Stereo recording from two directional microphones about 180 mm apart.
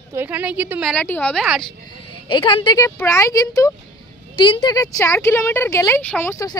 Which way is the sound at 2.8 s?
15° left (ahead or behind).